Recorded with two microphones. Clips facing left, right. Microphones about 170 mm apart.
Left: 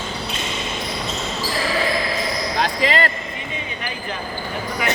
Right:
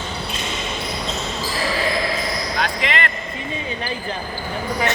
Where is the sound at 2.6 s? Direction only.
30° left (ahead or behind).